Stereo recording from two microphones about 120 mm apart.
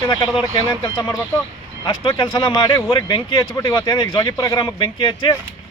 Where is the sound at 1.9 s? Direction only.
40° left (ahead or behind).